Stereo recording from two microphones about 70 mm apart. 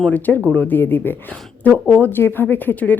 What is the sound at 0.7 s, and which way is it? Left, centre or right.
Speech, left.